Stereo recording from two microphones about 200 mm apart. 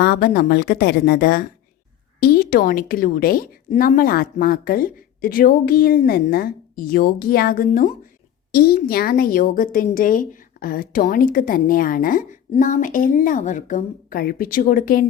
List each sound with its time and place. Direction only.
0.0 s a woman's voice: 50° left (ahead or behind)